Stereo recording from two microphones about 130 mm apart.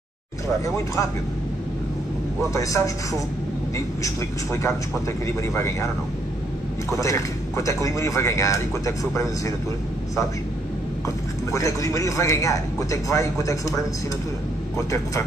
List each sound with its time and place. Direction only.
2.5 s a man's voice: 25° left (ahead or behind)
6.9 s a man's voice: 25° left (ahead or behind)
11.5 s a man's voice: 25° left (ahead or behind)